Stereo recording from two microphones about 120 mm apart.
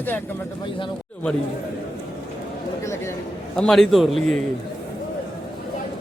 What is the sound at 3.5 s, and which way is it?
Speech, 5° left (ahead or behind).